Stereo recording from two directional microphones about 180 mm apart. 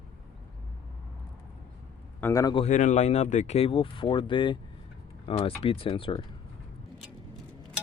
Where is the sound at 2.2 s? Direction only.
20° left (ahead or behind).